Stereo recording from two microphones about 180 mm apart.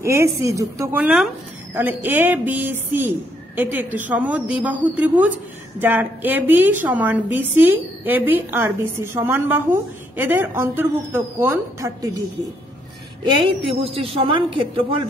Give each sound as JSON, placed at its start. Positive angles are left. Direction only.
{"t": 0.0, "sound": "a woman's voice", "side_deg": -15}
{"t": 13.7, "sound": "a man's voice", "side_deg": -30}